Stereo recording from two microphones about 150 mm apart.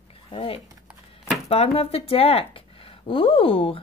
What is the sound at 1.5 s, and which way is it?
Speech, 40° left (ahead or behind).